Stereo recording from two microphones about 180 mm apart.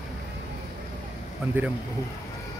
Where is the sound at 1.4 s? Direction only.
5° right (ahead or behind).